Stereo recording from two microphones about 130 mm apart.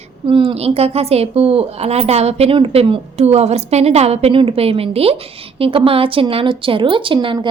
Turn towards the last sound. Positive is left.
turn(degrees=-35)  # may be behind; listen again after turning